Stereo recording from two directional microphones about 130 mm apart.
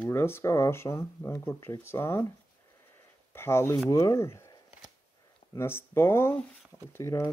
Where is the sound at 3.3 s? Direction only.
20° left (ahead or behind).